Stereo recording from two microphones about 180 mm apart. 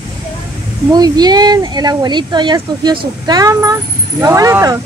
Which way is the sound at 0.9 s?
20° right (ahead or behind).